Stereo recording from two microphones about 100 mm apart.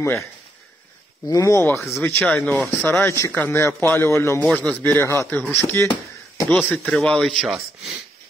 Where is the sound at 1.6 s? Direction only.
20° left (ahead or behind).